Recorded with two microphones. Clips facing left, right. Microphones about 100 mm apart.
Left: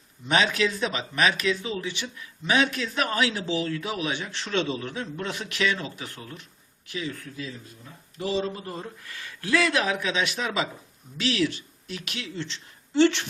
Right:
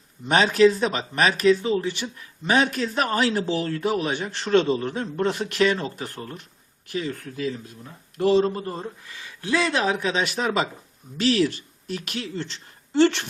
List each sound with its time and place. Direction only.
0.3 s speech: 40° right (ahead or behind)
7.3 s speech: 60° right (ahead or behind); by 8.8 s 40° right (ahead or behind)
8.8 s speech: 20° right (ahead or behind); by 13.2 s 45° right (ahead or behind)